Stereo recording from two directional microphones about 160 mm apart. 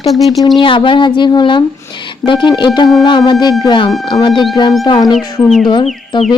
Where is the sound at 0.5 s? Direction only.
30° left (ahead or behind).